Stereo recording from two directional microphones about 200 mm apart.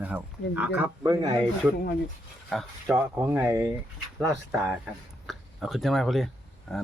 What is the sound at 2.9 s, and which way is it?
Speech, 10° right (ahead or behind).